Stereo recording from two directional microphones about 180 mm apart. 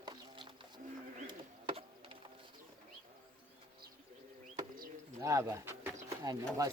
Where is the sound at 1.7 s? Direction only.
30° right (ahead or behind).